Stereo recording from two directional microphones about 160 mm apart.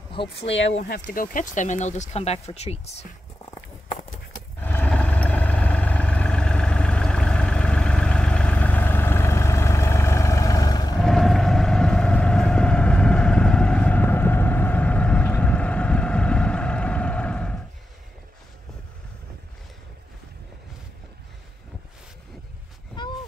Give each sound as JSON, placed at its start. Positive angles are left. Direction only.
{"t": 0.8, "sound": "speech", "side_deg": 60}
{"t": 4.6, "sound": "vehicle", "side_deg": 10}
{"t": 11.0, "sound": "vehicle", "side_deg": 0}
{"t": 23.0, "sound": "a sound", "side_deg": 30}